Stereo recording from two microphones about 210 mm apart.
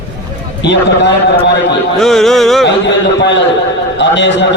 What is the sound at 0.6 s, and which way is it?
Speech, 55° left (ahead or behind).